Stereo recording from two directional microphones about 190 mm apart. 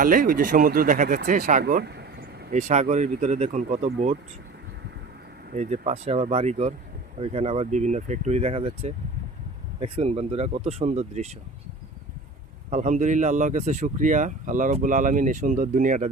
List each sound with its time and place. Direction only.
0.0 s speech: 45° right (ahead or behind)
5.5 s speech: 40° right (ahead or behind)
12.7 s speech: 40° right (ahead or behind)